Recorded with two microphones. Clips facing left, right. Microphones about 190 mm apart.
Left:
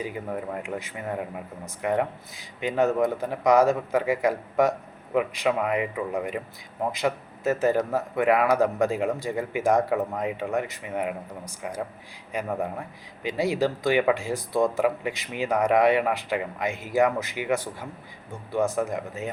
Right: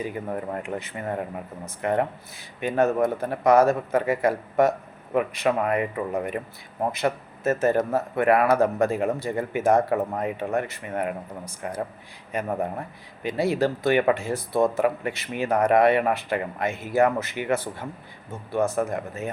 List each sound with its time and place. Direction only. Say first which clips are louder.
0.1 s a man's voice: right 2 dB; 5° left (ahead or behind)
13.2 s a man's voice: right 1 dB; 15° left (ahead or behind)